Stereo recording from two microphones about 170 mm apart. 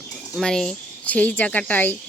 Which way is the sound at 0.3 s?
Centre (ahead or behind).